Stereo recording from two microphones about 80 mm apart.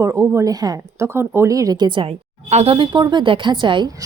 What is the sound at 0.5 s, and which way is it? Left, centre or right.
Speech, right.